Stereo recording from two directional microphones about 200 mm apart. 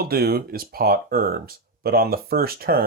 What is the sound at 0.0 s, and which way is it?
Speech, 50° right (ahead or behind).